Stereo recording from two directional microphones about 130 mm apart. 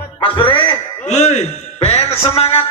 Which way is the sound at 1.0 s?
60° left (ahead or behind).